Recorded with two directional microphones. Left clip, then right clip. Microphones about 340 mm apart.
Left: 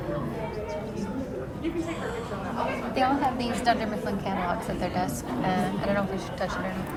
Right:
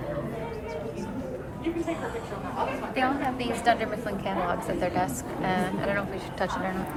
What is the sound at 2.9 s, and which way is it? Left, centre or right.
A woman's voice, centre.